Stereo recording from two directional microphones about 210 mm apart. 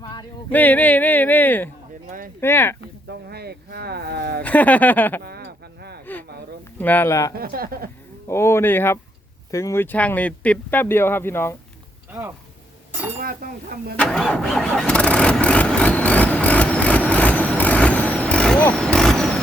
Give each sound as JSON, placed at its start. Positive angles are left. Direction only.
{"t": 0.0, "sound": "a sound", "side_deg": 20}
{"t": 0.5, "sound": "speech", "side_deg": 10}
{"t": 2.8, "sound": "speech", "side_deg": -50}
{"t": 4.4, "sound": "speech", "side_deg": 5}
{"t": 5.2, "sound": "a sound", "side_deg": -50}
{"t": 6.7, "sound": "speech", "side_deg": 10}
{"t": 7.3, "sound": "speech", "side_deg": -45}
{"t": 8.3, "sound": "speech", "side_deg": 10}
{"t": 13.1, "sound": "speech", "side_deg": -45}
{"t": 13.9, "sound": "engine starting", "side_deg": 5}